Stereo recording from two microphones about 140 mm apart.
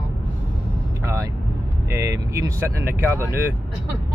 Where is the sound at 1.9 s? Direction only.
20° right (ahead or behind).